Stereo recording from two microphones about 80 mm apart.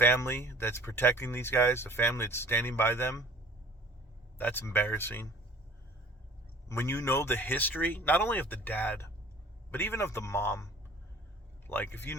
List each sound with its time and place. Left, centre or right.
0.0 s speech: left
4.4 s speech: left
6.7 s speech: left
11.7 s speech: left